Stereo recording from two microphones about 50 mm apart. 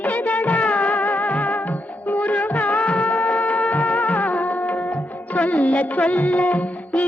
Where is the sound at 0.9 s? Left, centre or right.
Left.